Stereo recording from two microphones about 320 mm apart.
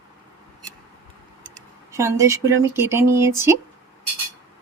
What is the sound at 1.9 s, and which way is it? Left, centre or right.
Speech, centre.